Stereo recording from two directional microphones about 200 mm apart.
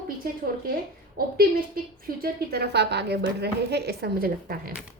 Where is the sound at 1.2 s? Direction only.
45° right (ahead or behind).